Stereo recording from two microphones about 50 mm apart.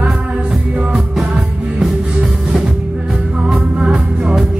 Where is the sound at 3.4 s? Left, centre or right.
Centre.